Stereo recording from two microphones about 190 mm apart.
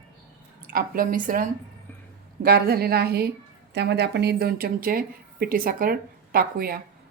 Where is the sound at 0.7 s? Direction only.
50° right (ahead or behind).